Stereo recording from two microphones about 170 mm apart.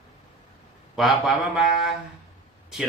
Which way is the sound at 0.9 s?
Centre (ahead or behind).